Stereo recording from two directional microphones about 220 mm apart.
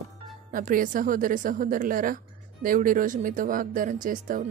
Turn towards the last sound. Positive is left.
turn(degrees=-40)  # may be behind; listen again after turning